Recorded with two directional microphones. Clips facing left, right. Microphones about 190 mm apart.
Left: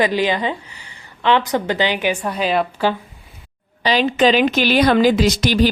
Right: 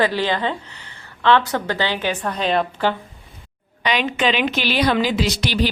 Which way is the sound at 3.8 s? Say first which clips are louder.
Left 5 dB; 35° left (ahead or behind).